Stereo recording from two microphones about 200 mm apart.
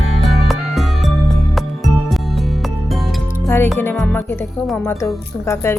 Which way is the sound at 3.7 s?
10° left (ahead or behind).